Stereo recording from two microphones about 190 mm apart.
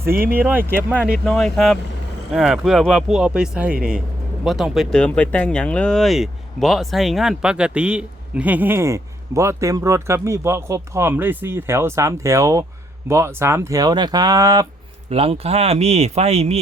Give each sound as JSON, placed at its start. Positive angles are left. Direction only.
{"t": 0.1, "sound": "speech", "side_deg": -55}
{"t": 0.3, "sound": "speech", "side_deg": -10}
{"t": 1.2, "sound": "speech", "side_deg": 5}
{"t": 15.1, "sound": "speech", "side_deg": -30}